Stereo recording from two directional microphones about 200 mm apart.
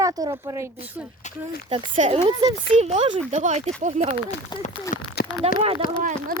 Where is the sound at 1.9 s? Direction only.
35° right (ahead or behind).